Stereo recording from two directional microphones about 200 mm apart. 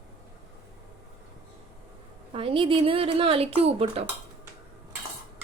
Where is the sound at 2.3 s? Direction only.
30° right (ahead or behind).